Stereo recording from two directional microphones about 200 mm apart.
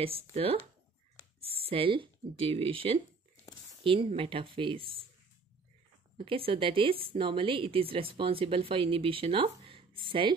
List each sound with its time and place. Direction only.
0.0 s a woman's voice: 30° right (ahead or behind)
6.1 s a woman's voice: 25° right (ahead or behind)